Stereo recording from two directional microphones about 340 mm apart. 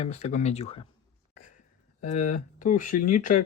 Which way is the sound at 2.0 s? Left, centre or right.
Centre.